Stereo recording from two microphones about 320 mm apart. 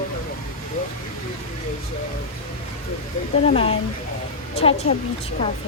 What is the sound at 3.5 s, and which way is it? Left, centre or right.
A woman's voice, centre.